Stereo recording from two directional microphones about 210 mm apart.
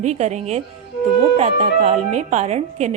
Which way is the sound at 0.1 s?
35° right (ahead or behind).